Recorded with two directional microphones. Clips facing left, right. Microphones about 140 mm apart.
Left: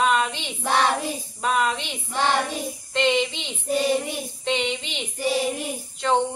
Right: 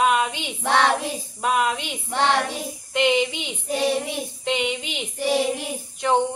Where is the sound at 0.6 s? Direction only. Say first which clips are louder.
Right 2 dB; 75° right (ahead or behind).